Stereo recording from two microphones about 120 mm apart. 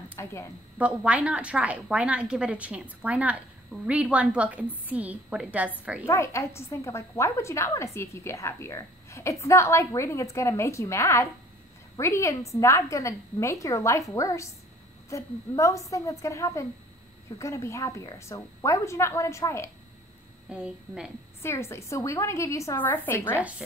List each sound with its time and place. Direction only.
0.1 s a woman's voice: 25° left (ahead or behind)
0.7 s a woman's voice: 10° right (ahead or behind)
6.0 s a woman's voice: 25° left (ahead or behind)
20.4 s a woman's voice: 5° right (ahead or behind)
21.4 s a woman's voice: 20° left (ahead or behind)